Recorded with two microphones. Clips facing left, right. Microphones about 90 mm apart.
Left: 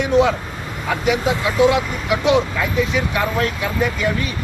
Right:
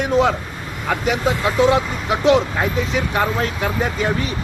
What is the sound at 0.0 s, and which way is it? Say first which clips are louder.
Speech: left 1 dB; 45° right (ahead or behind).